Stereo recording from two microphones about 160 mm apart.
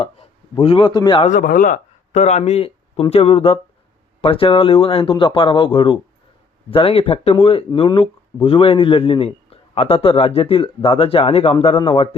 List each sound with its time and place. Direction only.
0.6 s a man's voice: 35° left (ahead or behind)
1.2 s a man's voice: 55° left (ahead or behind); by 11.8 s 35° left (ahead or behind)